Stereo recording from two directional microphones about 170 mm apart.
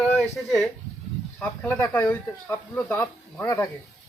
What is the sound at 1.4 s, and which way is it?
Speech, 5° left (ahead or behind).